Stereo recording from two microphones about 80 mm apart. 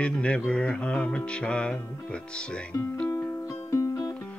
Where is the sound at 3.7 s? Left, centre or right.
Left.